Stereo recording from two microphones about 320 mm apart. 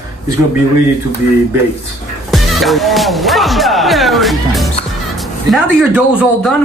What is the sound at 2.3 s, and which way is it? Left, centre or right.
Speech, centre.